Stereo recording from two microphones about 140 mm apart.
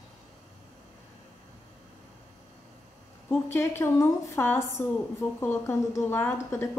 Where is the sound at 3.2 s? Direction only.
15° left (ahead or behind).